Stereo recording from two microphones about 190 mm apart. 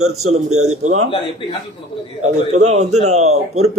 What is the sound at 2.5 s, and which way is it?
A man's voice, 35° right (ahead or behind).